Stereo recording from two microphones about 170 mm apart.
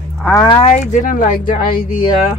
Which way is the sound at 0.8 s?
50° left (ahead or behind).